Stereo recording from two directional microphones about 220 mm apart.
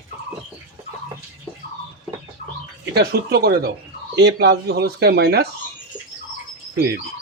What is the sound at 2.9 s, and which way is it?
Speech, 45° right (ahead or behind).